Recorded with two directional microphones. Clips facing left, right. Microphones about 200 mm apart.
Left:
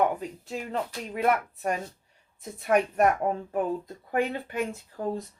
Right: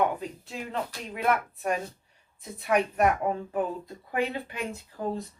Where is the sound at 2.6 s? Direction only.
45° left (ahead or behind).